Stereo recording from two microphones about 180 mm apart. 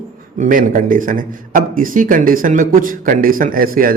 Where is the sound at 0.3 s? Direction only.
45° right (ahead or behind).